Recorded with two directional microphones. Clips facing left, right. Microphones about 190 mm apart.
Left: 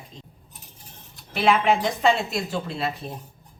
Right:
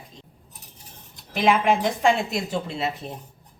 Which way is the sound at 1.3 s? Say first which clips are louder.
Even; 10° right (ahead or behind).